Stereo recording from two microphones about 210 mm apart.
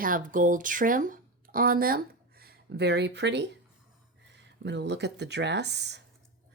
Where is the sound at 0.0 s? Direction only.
40° right (ahead or behind).